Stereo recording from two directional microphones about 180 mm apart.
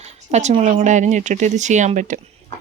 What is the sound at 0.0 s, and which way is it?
Speech, 40° right (ahead or behind).